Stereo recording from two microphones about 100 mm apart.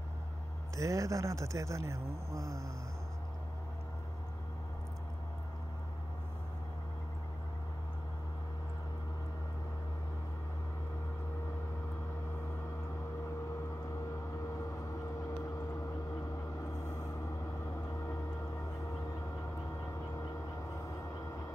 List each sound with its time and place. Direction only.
0.7 s speech: 35° right (ahead or behind)